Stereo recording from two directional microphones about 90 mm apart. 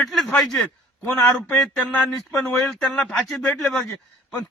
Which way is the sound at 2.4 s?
10° left (ahead or behind).